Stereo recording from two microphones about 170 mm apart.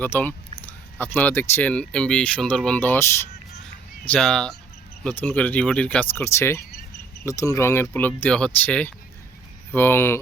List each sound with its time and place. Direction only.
0.0 s speech: 10° left (ahead or behind)